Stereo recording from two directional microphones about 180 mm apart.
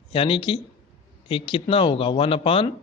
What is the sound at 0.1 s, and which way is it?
Speech, 30° left (ahead or behind).